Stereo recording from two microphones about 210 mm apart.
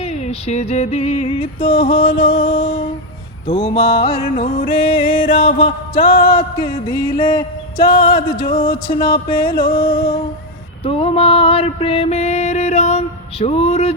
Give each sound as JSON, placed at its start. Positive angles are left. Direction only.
{"t": 0.0, "sound": "music", "side_deg": 30}
{"t": 10.8, "sound": "music", "side_deg": 25}